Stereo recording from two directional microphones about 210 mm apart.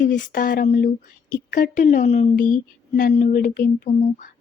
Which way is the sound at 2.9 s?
40° left (ahead or behind).